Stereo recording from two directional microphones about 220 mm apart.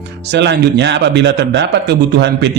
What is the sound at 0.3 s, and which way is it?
Speech, 50° right (ahead or behind).